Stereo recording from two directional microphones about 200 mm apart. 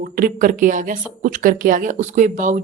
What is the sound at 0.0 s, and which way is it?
A woman's voice, 45° right (ahead or behind).